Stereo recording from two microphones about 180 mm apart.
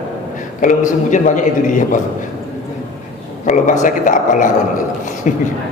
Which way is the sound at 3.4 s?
45° left (ahead or behind).